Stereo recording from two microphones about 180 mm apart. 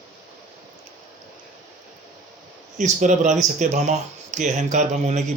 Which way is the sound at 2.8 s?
45° right (ahead or behind).